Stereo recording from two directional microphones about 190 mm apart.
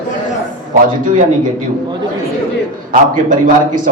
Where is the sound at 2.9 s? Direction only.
45° right (ahead or behind).